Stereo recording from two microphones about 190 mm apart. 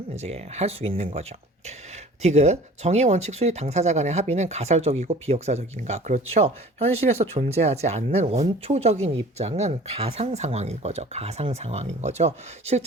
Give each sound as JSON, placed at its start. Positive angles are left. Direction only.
{"t": 0.2, "sound": "speech", "side_deg": -35}